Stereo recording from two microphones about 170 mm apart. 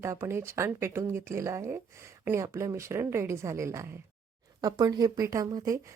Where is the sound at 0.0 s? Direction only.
15° right (ahead or behind).